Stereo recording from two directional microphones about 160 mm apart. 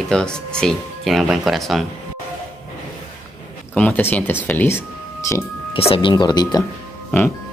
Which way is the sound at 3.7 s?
10° left (ahead or behind).